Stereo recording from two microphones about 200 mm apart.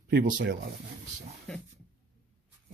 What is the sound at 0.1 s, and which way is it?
Speech, 55° right (ahead or behind).